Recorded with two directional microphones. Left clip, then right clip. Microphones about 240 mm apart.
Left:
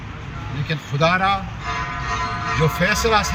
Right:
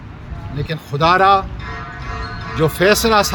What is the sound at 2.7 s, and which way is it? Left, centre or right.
Speech, right.